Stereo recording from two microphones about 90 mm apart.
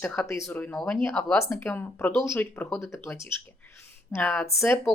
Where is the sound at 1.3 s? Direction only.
30° left (ahead or behind).